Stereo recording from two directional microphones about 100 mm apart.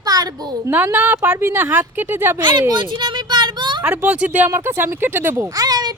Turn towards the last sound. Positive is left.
turn(degrees=-40)  # may be behind; listen again after turning